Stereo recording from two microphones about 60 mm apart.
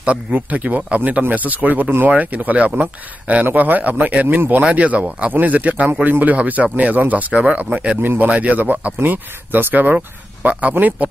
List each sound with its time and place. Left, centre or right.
0.0 s speech: right
8.0 s speech: right